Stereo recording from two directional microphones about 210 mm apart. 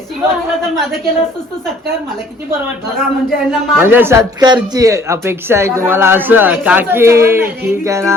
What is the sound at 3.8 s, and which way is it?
Speech, 10° right (ahead or behind).